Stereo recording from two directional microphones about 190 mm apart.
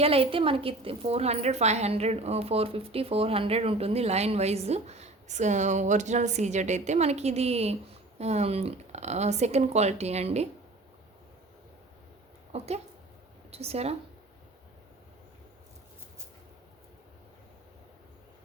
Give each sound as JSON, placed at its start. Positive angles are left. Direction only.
{"t": 0.0, "sound": "a woman's voice", "side_deg": -30}
{"t": 12.5, "sound": "a woman's voice", "side_deg": -35}